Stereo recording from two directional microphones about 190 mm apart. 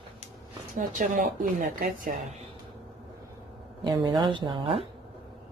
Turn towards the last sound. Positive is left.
turn(degrees=-25)  # may be behind; listen again after turning